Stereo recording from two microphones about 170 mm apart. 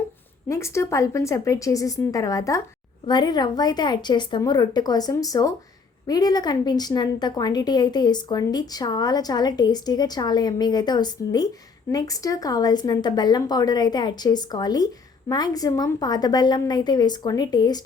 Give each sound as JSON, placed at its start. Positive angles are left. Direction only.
{"t": 0.4, "sound": "a woman's voice", "side_deg": 15}